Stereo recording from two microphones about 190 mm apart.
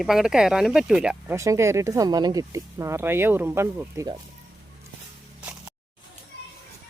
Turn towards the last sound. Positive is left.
turn(degrees=-10)  # may be behind; listen again after turning